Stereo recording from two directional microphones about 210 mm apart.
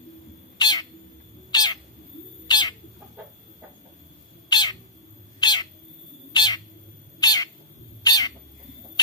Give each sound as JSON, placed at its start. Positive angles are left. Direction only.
{"t": 0.6, "sound": "cat", "side_deg": 20}
{"t": 4.5, "sound": "bird", "side_deg": 20}
{"t": 5.4, "sound": "cat", "side_deg": 20}